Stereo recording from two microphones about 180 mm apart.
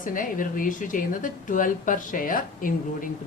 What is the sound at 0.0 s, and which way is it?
A woman's voice, 50° left (ahead or behind).